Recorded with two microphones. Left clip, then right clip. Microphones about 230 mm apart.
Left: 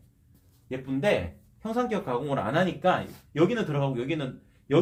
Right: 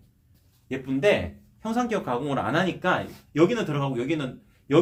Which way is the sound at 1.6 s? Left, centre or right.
Right.